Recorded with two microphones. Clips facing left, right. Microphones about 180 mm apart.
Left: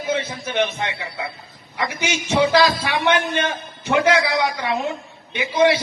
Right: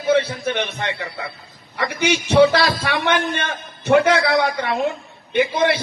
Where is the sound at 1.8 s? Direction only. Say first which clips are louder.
Right 4 dB; 55° right (ahead or behind).